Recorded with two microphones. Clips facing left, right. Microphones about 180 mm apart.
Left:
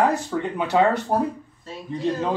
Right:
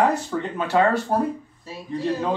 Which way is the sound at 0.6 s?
20° left (ahead or behind).